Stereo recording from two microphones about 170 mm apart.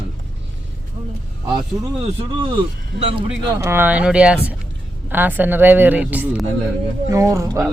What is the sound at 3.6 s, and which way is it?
A woman's voice, 15° right (ahead or behind).